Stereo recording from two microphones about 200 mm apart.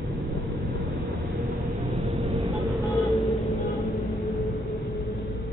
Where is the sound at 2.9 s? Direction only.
Centre (ahead or behind).